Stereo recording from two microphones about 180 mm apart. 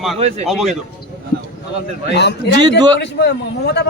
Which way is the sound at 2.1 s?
70° left (ahead or behind).